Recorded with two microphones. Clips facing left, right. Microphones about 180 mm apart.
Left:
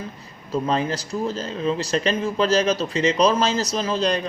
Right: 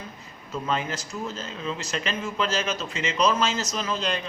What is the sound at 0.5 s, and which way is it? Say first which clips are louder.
Speech: left 6 dB; 35° left (ahead or behind).